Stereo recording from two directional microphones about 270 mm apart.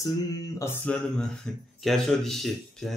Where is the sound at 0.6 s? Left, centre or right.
Centre.